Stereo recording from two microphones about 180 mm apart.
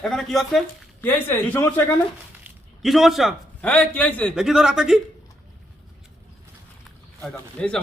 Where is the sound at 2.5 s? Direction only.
Centre (ahead or behind).